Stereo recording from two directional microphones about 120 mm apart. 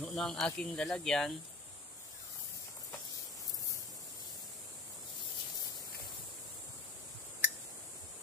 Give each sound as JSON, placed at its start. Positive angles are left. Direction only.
{"t": 0.0, "sound": "speech", "side_deg": 5}